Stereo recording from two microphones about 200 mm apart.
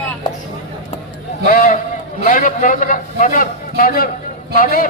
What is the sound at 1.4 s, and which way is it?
A man's voice, 45° left (ahead or behind).